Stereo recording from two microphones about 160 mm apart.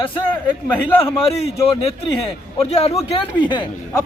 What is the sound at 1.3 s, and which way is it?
Speech, 40° left (ahead or behind).